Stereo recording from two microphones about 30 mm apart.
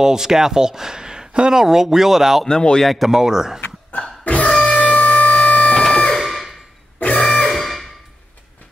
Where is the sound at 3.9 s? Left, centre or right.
Left.